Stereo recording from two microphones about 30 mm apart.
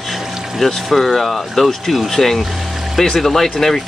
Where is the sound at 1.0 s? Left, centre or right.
Centre.